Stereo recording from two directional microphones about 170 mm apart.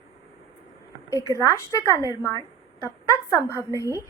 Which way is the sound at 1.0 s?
20° left (ahead or behind).